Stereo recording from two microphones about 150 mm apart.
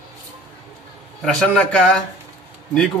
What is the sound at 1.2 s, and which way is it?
Speech, 5° left (ahead or behind).